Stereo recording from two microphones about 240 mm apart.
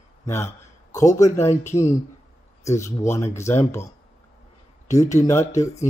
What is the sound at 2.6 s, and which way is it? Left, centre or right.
Speech, centre.